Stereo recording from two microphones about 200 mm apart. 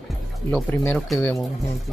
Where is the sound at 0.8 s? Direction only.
5° left (ahead or behind).